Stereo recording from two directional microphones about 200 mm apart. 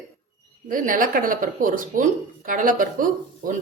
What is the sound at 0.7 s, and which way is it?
A woman's voice, 45° right (ahead or behind).